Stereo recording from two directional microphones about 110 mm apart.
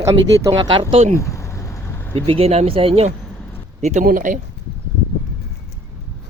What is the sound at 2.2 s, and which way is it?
Speech, 65° right (ahead or behind).